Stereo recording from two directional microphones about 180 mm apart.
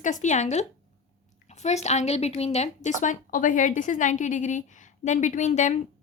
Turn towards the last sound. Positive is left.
turn(degrees=40)  # may be behind; listen again after turning